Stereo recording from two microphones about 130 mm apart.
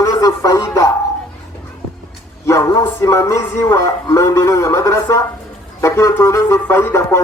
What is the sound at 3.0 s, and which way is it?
Speech, 25° left (ahead or behind).